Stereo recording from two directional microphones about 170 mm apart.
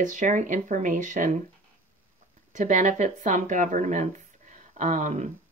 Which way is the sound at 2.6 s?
45° right (ahead or behind).